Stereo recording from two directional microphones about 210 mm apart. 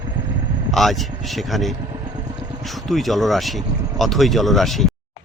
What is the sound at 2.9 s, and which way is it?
Speech, centre (ahead or behind).